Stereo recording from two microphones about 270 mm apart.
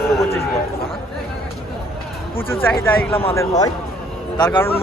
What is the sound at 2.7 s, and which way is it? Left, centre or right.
Speech, centre.